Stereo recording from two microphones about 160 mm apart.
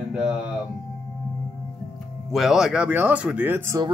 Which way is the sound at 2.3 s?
Centre (ahead or behind).